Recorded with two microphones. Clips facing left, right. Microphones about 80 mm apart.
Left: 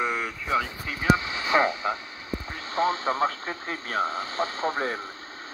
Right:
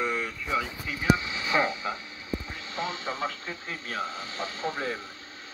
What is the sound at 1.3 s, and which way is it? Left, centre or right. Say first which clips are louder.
Speech: left 4 dB; left.